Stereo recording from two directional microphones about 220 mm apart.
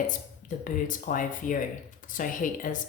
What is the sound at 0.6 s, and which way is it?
Speech, 35° left (ahead or behind).